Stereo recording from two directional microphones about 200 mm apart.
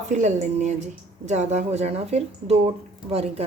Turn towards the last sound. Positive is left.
turn(degrees=-30)  # may be behind; listen again after turning